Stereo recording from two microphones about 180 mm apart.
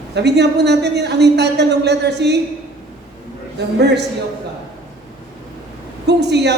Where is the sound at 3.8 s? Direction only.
70° right (ahead or behind).